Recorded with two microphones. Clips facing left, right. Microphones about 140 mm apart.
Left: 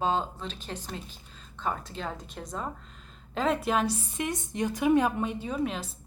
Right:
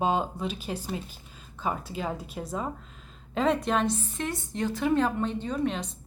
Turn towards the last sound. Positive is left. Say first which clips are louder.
# right 2 dB
turn(degrees=5)  # may be behind; listen again after turning